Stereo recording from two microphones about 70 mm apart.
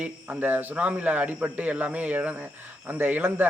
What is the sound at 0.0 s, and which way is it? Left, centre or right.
A man's voice, right.